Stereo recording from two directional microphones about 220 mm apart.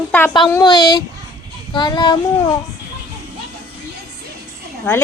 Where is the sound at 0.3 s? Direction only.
20° left (ahead or behind).